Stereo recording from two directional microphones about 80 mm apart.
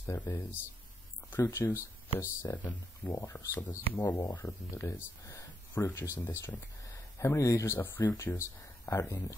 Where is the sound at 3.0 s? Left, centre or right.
Centre.